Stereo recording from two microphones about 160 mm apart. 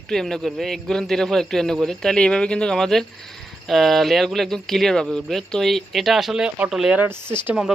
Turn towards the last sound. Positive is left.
turn(degrees=-5)  # may be behind; listen again after turning